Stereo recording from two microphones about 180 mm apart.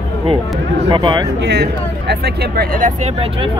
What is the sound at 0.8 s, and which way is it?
Speech, 25° right (ahead or behind).